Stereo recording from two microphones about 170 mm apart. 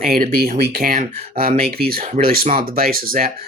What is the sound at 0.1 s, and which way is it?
Speech, 60° right (ahead or behind).